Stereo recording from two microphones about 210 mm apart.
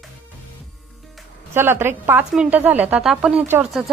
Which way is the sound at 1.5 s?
10° right (ahead or behind).